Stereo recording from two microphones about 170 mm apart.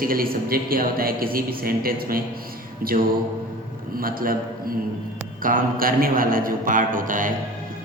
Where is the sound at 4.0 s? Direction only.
60° right (ahead or behind).